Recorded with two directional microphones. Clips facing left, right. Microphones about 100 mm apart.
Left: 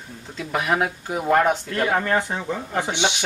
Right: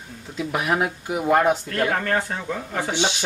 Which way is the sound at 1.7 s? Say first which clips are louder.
Left 1 dB; 15° left (ahead or behind).